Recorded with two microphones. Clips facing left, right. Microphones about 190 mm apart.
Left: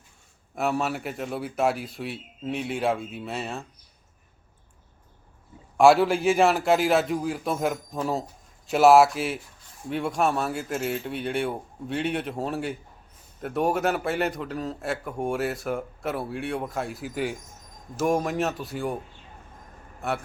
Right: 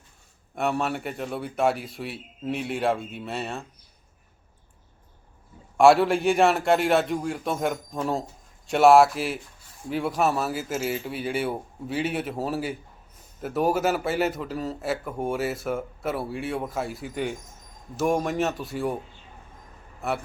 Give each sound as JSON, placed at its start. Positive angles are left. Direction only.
{"t": 0.5, "sound": "a man's voice", "side_deg": 0}
{"t": 5.7, "sound": "a man's voice", "side_deg": 0}
{"t": 20.0, "sound": "a man's voice", "side_deg": 0}